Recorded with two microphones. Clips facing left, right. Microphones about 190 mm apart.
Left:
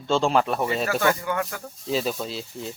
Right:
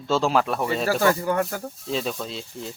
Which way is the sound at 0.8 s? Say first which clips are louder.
Right 2 dB; 35° right (ahead or behind).